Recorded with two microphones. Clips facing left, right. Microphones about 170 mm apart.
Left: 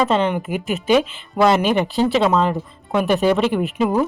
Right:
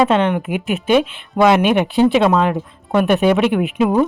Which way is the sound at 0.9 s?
Centre (ahead or behind).